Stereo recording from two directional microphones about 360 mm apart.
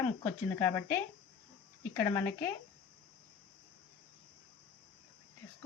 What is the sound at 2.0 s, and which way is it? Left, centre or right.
Speech, centre.